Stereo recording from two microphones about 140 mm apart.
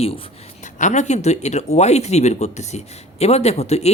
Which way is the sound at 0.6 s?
60° left (ahead or behind).